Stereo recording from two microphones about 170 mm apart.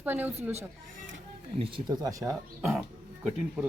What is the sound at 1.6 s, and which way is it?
Speech, 25° right (ahead or behind).